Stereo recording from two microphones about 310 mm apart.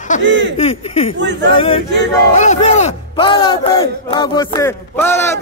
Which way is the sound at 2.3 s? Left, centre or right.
Left.